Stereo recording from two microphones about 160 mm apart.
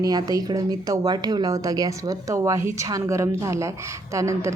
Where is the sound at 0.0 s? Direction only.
25° right (ahead or behind).